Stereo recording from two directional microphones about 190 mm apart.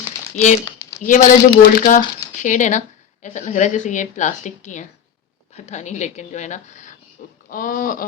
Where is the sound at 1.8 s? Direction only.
40° left (ahead or behind).